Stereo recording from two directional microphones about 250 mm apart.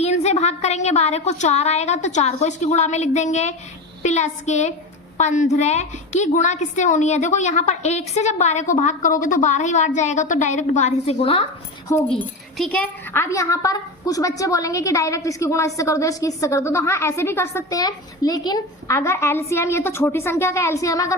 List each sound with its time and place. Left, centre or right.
0.0 s a woman's voice: left
12.1 s speech: centre